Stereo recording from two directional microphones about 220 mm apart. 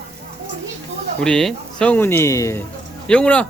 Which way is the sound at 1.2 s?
5° left (ahead or behind).